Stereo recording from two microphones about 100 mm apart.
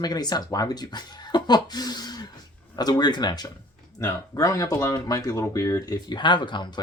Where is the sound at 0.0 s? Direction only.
40° left (ahead or behind).